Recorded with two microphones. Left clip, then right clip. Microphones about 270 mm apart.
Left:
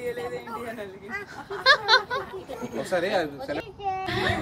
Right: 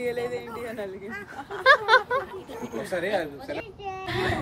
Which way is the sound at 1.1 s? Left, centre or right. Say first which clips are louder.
Left 1 dB; centre.